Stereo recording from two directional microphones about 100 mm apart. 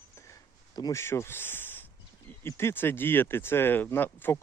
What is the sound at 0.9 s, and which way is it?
Speech, 25° left (ahead or behind).